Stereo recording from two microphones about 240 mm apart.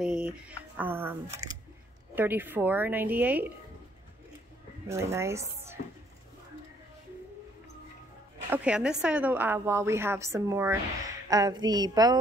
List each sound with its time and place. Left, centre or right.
0.0 s a woman's voice: centre
4.8 s a woman's voice: centre
8.5 s a woman's voice: centre